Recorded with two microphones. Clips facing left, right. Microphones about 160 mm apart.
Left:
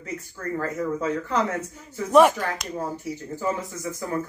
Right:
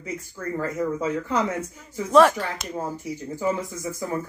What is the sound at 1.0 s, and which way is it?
Speech, 10° right (ahead or behind).